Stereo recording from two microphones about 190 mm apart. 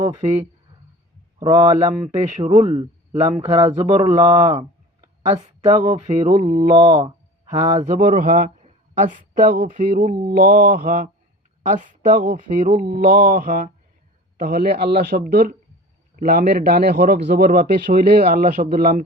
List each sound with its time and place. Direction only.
1.4 s a man's voice: 25° right (ahead or behind)
5.8 s speech: 35° right (ahead or behind)
6.7 s a man's voice: 25° right (ahead or behind)
7.9 s speech: 50° right (ahead or behind)